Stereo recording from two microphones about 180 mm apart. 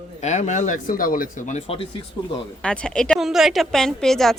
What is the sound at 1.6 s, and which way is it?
Speech, 30° left (ahead or behind).